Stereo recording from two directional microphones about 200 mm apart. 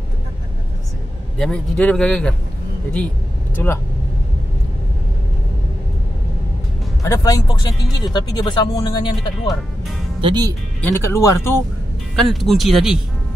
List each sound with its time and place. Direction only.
1.4 s a man's voice: 5° left (ahead or behind)
3.5 s speech: 10° left (ahead or behind)
7.0 s speech: 15° left (ahead or behind)
10.2 s speech: 20° right (ahead or behind)
10.8 s speech: 15° left (ahead or behind)
12.2 s a man's voice: centre (ahead or behind)